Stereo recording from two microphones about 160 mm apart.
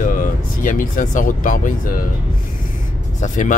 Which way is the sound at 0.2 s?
60° left (ahead or behind).